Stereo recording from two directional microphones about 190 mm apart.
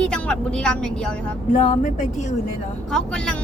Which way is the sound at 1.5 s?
35° left (ahead or behind).